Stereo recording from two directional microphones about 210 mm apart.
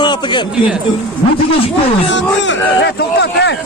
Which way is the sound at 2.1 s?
60° left (ahead or behind).